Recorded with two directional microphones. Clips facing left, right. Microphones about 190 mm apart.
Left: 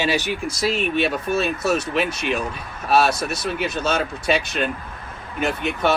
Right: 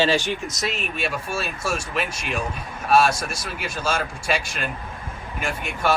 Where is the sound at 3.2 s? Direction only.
25° left (ahead or behind).